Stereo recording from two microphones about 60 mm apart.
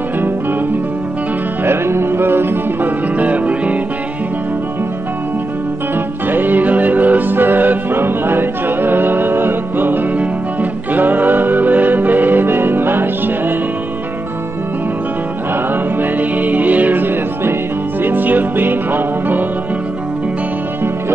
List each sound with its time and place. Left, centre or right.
1.6 s music: right
6.2 s music: right
15.7 s music: right